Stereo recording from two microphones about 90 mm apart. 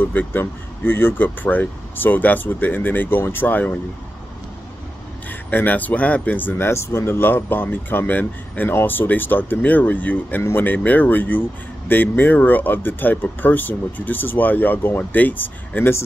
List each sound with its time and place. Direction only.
0.0 s speech: 20° left (ahead or behind)
5.5 s speech: 20° left (ahead or behind)